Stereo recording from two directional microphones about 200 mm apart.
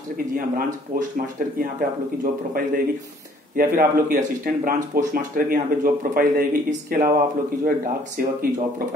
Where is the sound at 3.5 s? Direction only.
40° right (ahead or behind).